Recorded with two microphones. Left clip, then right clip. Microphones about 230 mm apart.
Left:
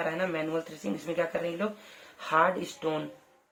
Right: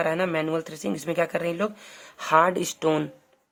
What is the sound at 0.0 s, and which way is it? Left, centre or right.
Speech, right.